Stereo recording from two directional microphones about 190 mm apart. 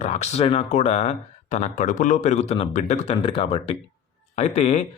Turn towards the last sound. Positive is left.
turn(degrees=35)  # may be behind; listen again after turning